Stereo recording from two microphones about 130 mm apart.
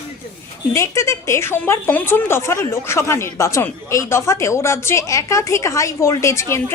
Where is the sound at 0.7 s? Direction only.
25° left (ahead or behind).